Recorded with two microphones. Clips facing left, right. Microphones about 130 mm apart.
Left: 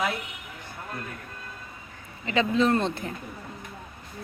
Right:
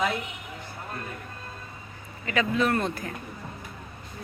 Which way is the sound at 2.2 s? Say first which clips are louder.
Left 2 dB; 25° left (ahead or behind).